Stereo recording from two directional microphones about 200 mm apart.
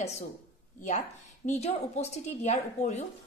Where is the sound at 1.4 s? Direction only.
35° left (ahead or behind).